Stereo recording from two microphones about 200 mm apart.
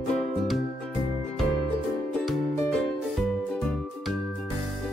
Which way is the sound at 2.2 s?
Centre (ahead or behind).